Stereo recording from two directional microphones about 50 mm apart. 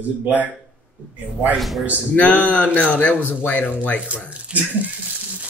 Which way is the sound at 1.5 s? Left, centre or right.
Centre.